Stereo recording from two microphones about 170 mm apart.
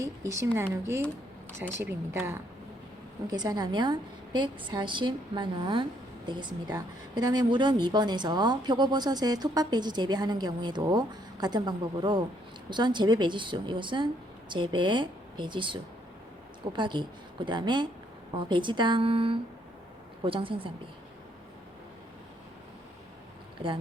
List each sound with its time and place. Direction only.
0.0 s a woman's voice: 15° right (ahead or behind)